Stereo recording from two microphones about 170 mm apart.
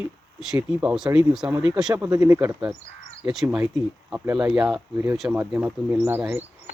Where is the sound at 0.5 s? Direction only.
5° right (ahead or behind).